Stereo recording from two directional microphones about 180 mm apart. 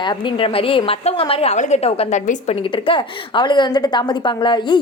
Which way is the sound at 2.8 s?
25° left (ahead or behind).